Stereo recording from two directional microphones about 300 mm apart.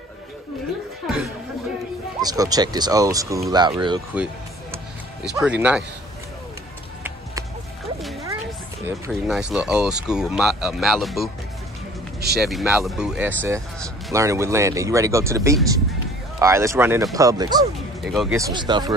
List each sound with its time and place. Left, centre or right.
2.2 s speech: centre
4.1 s music: centre
5.3 s speech: centre
8.8 s speech: centre
12.4 s speech: centre
18.0 s speech: centre
18.5 s speech: centre